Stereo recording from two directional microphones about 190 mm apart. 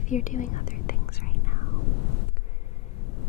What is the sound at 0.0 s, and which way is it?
Whispering, 40° left (ahead or behind).